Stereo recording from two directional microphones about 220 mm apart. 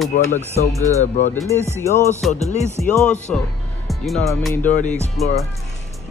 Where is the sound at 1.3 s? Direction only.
10° left (ahead or behind).